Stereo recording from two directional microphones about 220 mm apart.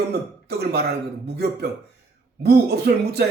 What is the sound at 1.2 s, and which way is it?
A man's voice, 45° right (ahead or behind).